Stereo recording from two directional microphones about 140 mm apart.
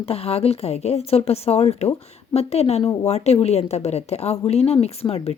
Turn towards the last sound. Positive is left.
turn(degrees=45)  # may be behind; listen again after turning